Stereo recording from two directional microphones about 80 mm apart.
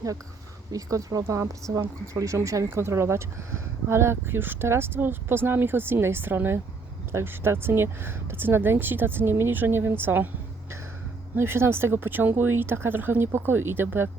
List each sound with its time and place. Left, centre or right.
0.7 s speech: right
11.3 s speech: right